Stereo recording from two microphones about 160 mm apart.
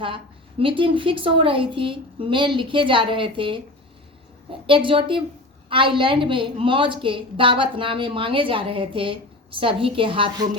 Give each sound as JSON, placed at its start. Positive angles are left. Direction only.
{"t": 0.6, "sound": "a woman's voice", "side_deg": -35}
{"t": 4.6, "sound": "a woman's voice", "side_deg": -35}